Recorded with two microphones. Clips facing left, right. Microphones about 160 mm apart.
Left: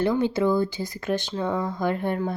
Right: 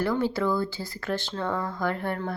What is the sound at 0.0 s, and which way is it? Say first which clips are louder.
Speech: left 3 dB; 20° left (ahead or behind).